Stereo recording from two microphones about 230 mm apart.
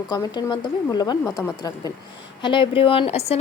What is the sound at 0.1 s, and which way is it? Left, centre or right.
A woman's voice, centre.